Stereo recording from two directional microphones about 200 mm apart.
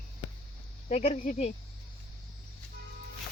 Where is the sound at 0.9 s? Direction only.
35° left (ahead or behind).